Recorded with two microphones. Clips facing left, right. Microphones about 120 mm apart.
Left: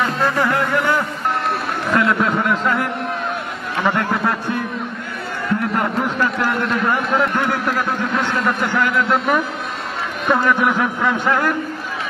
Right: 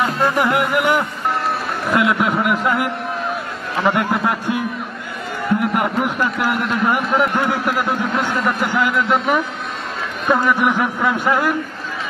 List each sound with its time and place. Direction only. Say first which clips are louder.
0.0 s music: right 1 dB; 20° right (ahead or behind)
6.3 s a man's voice: even; 5° right (ahead or behind)